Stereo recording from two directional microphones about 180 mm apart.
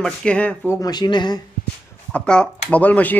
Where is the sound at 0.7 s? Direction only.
20° left (ahead or behind).